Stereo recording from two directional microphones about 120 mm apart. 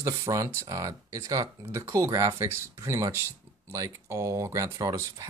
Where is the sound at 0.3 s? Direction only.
30° right (ahead or behind).